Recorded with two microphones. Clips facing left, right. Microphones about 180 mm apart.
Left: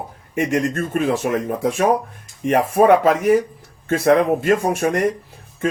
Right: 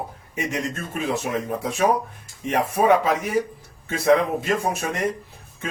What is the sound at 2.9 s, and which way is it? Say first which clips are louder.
Speech: left 6 dB; 50° left (ahead or behind).